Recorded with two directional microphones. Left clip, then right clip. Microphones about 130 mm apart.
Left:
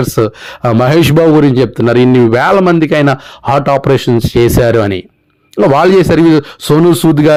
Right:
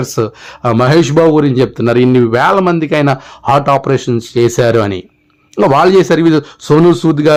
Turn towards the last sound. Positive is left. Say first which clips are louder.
# left 1 dB
turn(degrees=35)  # may be behind; listen again after turning